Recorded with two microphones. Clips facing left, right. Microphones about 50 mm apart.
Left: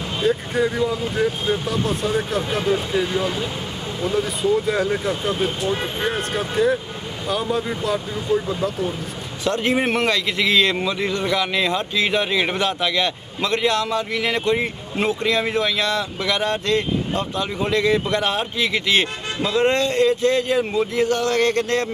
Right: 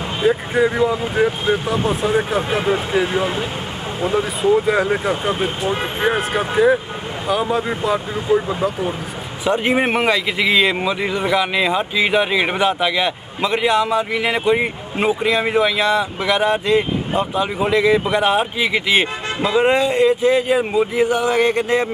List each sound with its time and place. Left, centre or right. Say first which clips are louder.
0.2 s speech: right 4 dB; centre
1.7 s speech: right 4 dB; centre